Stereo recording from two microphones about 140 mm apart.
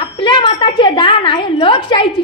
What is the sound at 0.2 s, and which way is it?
A woman's voice, 35° left (ahead or behind).